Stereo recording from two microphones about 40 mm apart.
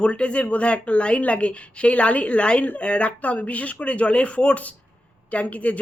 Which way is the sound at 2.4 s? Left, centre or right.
Left.